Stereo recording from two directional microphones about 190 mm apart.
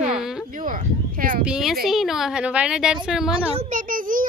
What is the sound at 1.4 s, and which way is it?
A child's voice, 5° right (ahead or behind).